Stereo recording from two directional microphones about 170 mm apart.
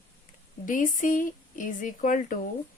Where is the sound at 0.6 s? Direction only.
50° left (ahead or behind).